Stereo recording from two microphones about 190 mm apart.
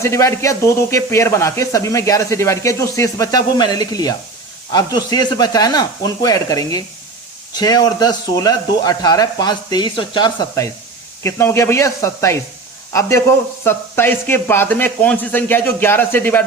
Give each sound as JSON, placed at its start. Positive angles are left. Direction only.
{"t": 0.0, "sound": "speech", "side_deg": 15}